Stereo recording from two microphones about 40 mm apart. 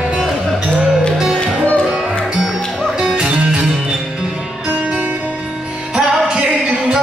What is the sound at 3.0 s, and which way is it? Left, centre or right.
Music, centre.